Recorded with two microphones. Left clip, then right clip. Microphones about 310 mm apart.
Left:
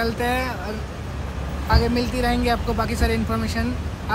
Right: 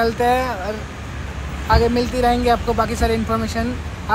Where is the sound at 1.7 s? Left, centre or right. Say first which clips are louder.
Right 5 dB; centre.